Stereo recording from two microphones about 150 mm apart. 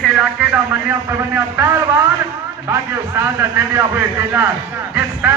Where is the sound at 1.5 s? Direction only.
20° right (ahead or behind).